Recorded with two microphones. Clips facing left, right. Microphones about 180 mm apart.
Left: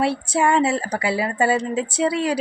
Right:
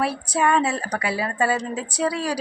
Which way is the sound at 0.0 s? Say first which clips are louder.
Left 2 dB; 25° left (ahead or behind).